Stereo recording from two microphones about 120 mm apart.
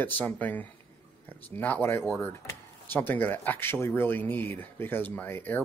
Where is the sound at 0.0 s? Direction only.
15° left (ahead or behind).